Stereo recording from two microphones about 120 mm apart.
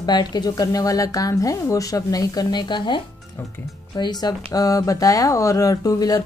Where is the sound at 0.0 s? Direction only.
35° left (ahead or behind).